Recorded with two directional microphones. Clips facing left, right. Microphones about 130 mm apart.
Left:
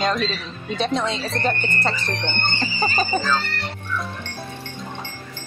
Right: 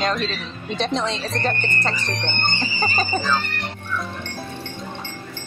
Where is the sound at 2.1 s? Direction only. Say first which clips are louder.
Even; 15° right (ahead or behind).